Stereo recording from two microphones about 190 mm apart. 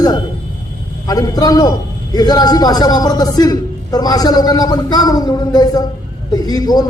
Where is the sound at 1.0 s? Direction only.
20° left (ahead or behind).